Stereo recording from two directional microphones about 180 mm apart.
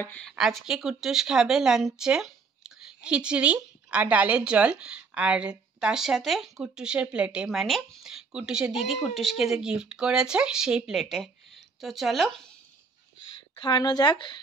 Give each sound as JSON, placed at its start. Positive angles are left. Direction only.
{"t": 0.0, "sound": "speech", "side_deg": 5}
{"t": 13.6, "sound": "speech", "side_deg": 25}